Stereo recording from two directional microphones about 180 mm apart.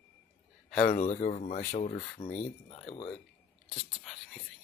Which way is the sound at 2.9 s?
35° left (ahead or behind).